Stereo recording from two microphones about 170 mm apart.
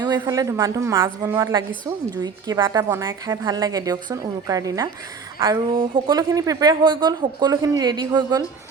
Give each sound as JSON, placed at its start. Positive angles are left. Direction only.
{"t": 0.0, "sound": "a woman's voice", "side_deg": -20}